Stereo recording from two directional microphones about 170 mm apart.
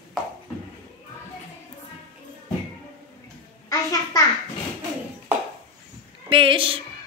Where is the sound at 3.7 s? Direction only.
20° left (ahead or behind).